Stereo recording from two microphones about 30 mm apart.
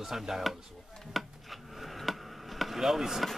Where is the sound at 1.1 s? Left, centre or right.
Centre.